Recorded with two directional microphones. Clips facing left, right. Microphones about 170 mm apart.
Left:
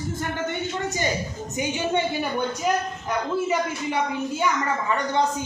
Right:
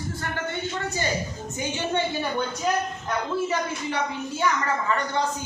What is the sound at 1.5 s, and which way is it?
A woman's voice, 15° left (ahead or behind).